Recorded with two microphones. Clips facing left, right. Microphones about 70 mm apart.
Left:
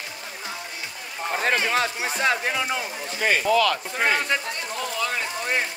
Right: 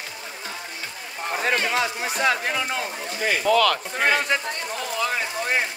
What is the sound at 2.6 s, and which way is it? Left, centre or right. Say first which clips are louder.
Speech: even; centre.